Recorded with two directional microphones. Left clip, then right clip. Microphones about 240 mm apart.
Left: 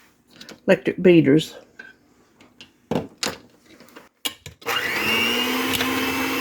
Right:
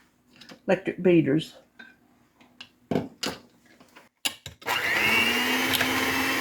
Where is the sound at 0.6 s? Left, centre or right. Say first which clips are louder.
Left 7 dB; left.